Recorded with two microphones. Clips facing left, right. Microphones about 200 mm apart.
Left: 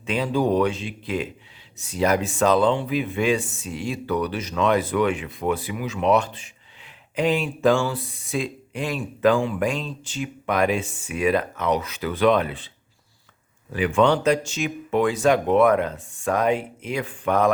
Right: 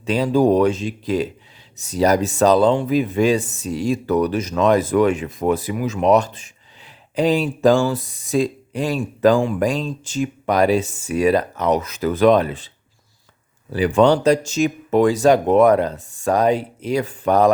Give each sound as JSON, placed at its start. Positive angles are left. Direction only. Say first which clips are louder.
{"t": 0.0, "sound": "speech", "louder": "right 6 dB", "side_deg": -40}
{"t": 13.7, "sound": "speech", "louder": "right 4 dB", "side_deg": -35}